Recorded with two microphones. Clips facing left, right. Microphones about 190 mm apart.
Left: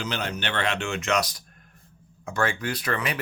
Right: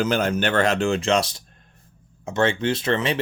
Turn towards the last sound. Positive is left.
turn(degrees=-25)  # may be behind; listen again after turning